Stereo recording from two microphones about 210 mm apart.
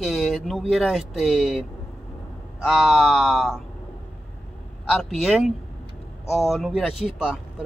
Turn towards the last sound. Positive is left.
turn(degrees=0)  # may be behind; listen again after turning